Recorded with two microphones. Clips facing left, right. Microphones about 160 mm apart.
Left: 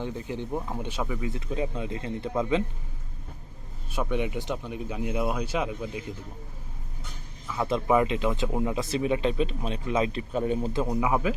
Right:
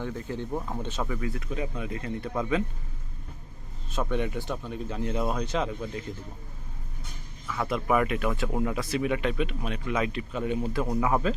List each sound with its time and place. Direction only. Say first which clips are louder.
0.0 s speech: even; 20° left (ahead or behind)
4.1 s speech: left 1 dB; 15° left (ahead or behind)
7.4 s speech: left 2 dB; 20° left (ahead or behind)
10.8 s speech: right 1 dB; 15° left (ahead or behind)